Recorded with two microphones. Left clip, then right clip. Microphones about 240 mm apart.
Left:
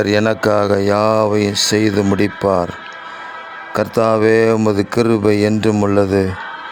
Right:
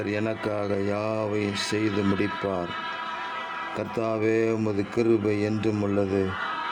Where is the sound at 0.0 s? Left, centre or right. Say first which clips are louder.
Left 14 dB; left.